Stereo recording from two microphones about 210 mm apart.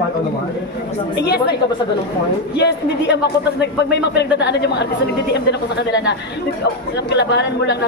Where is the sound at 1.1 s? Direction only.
50° left (ahead or behind).